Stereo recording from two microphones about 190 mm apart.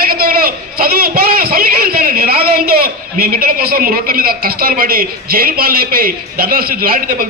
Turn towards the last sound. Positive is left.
turn(degrees=-50)  # may be behind; listen again after turning